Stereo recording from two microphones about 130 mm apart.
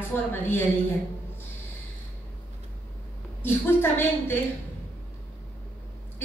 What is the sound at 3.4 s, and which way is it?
Speech, 20° left (ahead or behind).